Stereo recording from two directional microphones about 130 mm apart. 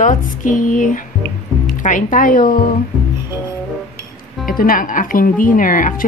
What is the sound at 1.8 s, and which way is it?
Speech, 75° left (ahead or behind).